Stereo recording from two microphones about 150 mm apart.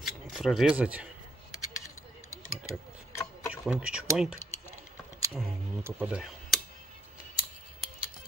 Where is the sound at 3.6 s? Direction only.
5° right (ahead or behind).